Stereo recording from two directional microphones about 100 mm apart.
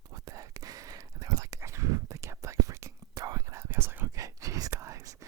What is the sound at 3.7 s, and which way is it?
Whispering, 20° right (ahead or behind).